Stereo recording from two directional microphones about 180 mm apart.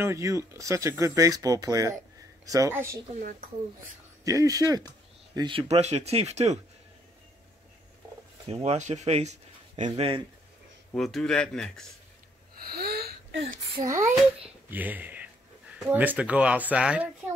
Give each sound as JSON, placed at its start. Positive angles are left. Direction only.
{"t": 0.0, "sound": "speech", "side_deg": -15}
{"t": 3.2, "sound": "speech", "side_deg": -50}
{"t": 4.2, "sound": "speech", "side_deg": -20}
{"t": 8.6, "sound": "speech", "side_deg": -40}
{"t": 11.0, "sound": "speech", "side_deg": 0}
{"t": 12.6, "sound": "a sound", "side_deg": -60}
{"t": 13.7, "sound": "speech", "side_deg": -15}